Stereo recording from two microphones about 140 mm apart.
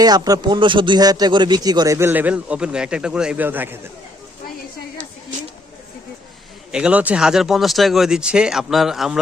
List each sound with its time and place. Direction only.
0.0 s speech: 30° right (ahead or behind)
6.7 s speech: 5° right (ahead or behind)